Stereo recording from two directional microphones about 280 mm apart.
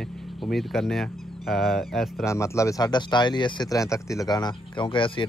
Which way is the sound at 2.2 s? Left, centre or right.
Centre.